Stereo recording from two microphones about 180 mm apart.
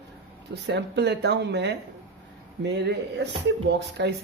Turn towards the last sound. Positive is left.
turn(degrees=-70)  # may be behind; listen again after turning